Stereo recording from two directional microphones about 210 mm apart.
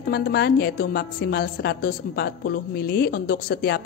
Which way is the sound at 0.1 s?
50° left (ahead or behind).